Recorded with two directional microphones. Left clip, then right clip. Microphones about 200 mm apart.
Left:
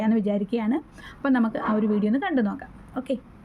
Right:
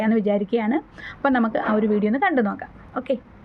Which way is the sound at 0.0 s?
15° left (ahead or behind).